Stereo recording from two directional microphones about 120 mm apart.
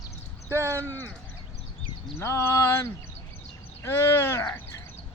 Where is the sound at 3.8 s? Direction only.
20° left (ahead or behind).